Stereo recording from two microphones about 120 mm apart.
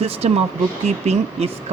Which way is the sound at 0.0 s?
60° right (ahead or behind).